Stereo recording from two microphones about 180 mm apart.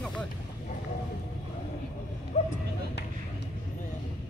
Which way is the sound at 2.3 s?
40° left (ahead or behind).